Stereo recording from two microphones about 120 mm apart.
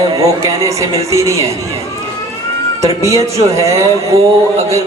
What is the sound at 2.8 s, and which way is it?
Speech, 25° right (ahead or behind).